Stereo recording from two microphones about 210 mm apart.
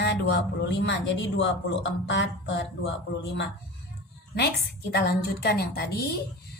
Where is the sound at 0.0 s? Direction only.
55° left (ahead or behind).